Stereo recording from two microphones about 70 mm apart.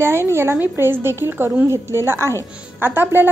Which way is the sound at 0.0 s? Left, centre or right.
Right.